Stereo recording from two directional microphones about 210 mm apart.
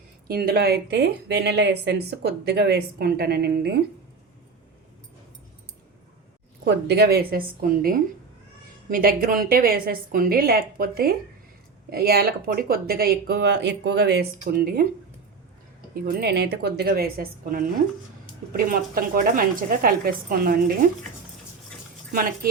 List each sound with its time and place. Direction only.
0.3 s speech: 45° right (ahead or behind)
6.7 s speech: 55° right (ahead or behind)
16.0 s speech: 45° right (ahead or behind)